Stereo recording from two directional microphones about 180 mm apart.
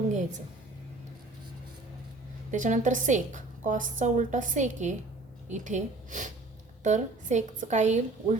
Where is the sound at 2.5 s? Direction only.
45° right (ahead or behind).